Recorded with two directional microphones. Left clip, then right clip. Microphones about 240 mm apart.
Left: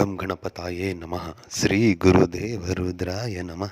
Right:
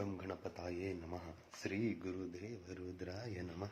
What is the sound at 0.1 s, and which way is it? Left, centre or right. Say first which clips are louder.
Speech: left 17 dB; left.